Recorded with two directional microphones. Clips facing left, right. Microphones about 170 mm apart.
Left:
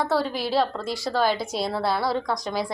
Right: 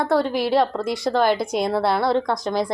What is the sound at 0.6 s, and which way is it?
A woman's voice, 20° right (ahead or behind).